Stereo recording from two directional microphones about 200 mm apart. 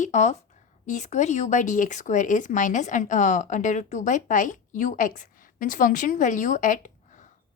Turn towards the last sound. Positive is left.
turn(degrees=40)  # may be behind; listen again after turning